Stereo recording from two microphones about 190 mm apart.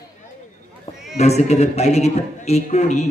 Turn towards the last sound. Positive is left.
turn(degrees=35)  # may be behind; listen again after turning